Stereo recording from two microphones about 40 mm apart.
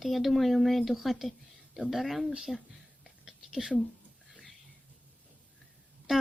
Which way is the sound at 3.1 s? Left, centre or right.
Centre.